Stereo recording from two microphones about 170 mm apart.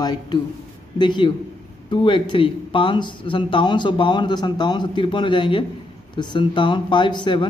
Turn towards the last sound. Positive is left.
turn(degrees=30)  # may be behind; listen again after turning